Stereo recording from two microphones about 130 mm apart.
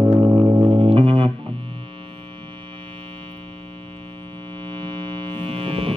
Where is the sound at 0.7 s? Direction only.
35° right (ahead or behind).